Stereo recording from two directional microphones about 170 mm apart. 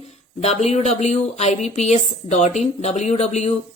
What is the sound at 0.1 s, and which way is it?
A woman's voice, 40° left (ahead or behind).